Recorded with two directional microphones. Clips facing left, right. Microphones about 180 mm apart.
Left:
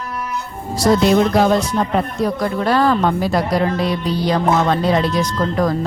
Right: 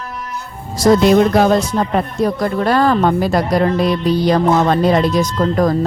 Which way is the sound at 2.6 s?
50° right (ahead or behind).